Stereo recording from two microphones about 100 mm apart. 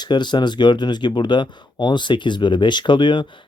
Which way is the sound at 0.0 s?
50° left (ahead or behind).